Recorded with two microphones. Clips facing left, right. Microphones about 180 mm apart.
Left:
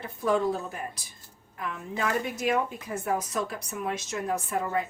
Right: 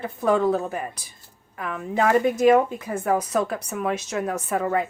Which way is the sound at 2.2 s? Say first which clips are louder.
Right 10 dB; 50° right (ahead or behind).